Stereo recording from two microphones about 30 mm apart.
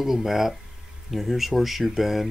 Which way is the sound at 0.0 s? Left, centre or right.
Centre.